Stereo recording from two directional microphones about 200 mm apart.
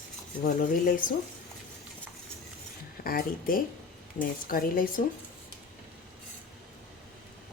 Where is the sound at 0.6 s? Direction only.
40° left (ahead or behind).